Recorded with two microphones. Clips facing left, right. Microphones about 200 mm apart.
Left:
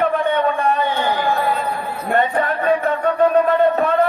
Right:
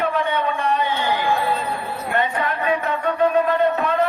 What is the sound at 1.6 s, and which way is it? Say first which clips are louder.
Music: left 3 dB; 50° left (ahead or behind).